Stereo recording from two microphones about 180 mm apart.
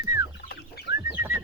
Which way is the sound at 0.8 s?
60° left (ahead or behind).